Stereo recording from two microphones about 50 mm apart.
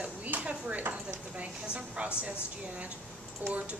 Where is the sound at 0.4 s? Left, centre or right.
Right.